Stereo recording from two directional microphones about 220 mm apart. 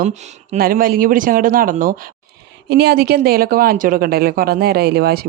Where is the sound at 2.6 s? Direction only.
50° right (ahead or behind).